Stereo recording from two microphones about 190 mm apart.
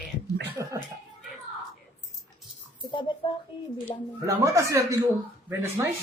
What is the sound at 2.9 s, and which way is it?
Speech, 25° left (ahead or behind).